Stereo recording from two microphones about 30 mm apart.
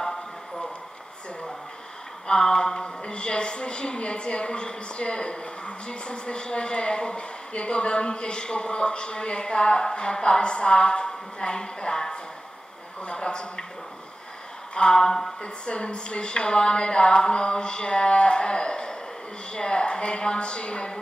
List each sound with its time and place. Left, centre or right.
2.2 s a woman's voice: left
14.7 s a sound: left
15.4 s a woman's voice: left